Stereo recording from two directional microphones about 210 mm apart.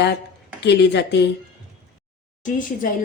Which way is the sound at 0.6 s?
55° left (ahead or behind).